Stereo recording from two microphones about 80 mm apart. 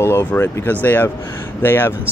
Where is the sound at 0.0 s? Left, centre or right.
Left.